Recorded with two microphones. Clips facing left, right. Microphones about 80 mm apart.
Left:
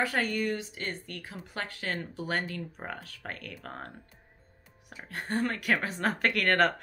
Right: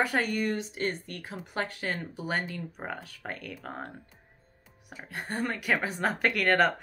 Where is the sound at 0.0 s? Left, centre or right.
Centre.